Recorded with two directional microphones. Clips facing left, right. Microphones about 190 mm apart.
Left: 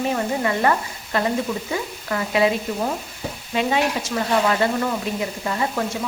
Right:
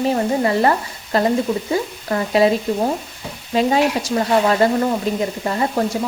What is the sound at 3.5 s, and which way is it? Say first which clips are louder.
Stir: right 5 dB; 35° right (ahead or behind).